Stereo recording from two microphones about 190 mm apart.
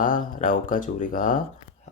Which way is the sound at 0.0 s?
45° left (ahead or behind).